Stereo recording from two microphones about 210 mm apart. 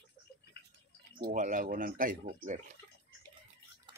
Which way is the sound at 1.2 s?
40° right (ahead or behind).